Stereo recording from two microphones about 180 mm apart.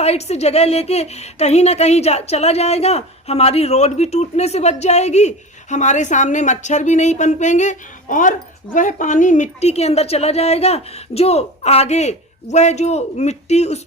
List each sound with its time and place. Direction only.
0.0 s speech: 35° left (ahead or behind)